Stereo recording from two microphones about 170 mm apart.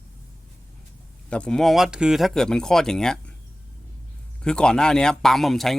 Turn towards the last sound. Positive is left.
turn(degrees=0)  # may be behind; listen again after turning